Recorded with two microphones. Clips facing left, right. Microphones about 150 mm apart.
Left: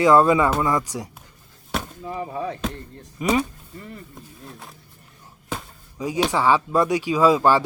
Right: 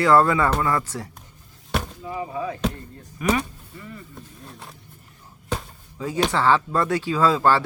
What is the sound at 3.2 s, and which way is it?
Speech, 25° left (ahead or behind).